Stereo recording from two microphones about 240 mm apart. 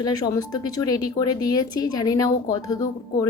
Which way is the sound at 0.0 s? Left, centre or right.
Centre.